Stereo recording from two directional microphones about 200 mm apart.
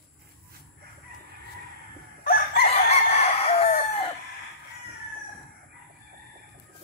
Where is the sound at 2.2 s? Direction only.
50° left (ahead or behind).